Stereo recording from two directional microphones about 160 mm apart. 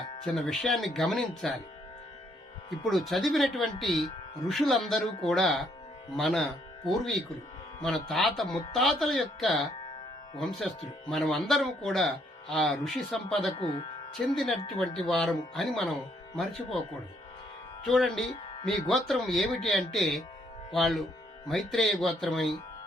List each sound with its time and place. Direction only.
0.3 s speech: centre (ahead or behind)
2.9 s speech: centre (ahead or behind)
13.6 s speech: 35° left (ahead or behind)
14.3 s speech: centre (ahead or behind)
17.8 s speech: centre (ahead or behind)